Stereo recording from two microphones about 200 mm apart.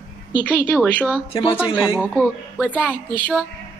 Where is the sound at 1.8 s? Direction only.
Centre (ahead or behind).